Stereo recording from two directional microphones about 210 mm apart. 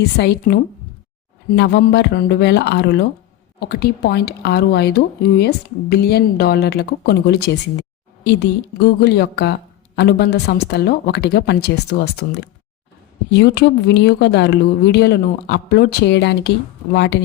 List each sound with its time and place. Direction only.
0.2 s a woman's voice: 50° left (ahead or behind)